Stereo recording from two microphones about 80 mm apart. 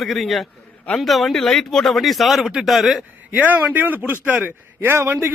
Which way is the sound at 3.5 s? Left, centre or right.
Right.